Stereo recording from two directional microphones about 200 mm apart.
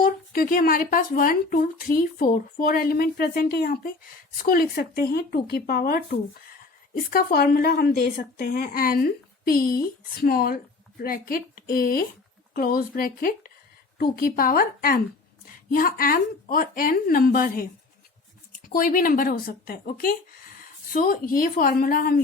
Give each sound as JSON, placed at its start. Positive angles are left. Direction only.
{"t": 0.0, "sound": "speech", "side_deg": 45}
{"t": 18.7, "sound": "speech", "side_deg": 45}